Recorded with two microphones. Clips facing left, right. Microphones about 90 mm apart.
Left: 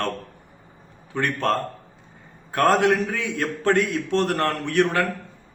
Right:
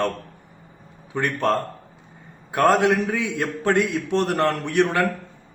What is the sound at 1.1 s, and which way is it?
A man's voice, 15° right (ahead or behind).